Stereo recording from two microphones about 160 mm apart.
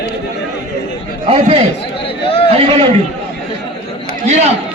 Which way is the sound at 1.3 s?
40° right (ahead or behind).